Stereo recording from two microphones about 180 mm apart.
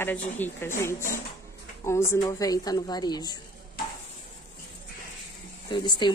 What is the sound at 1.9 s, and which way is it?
A woman's voice, 15° left (ahead or behind).